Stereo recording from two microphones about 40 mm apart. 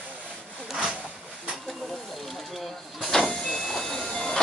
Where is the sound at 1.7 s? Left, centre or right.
Centre.